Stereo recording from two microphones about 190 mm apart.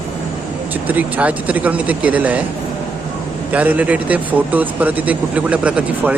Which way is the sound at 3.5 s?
10° right (ahead or behind).